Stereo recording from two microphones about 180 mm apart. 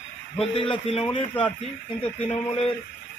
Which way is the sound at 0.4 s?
30° left (ahead or behind).